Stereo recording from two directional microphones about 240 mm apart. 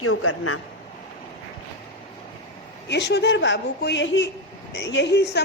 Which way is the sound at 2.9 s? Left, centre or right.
Left.